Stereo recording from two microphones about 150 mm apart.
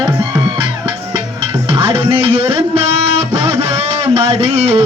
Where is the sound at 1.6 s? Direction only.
35° right (ahead or behind).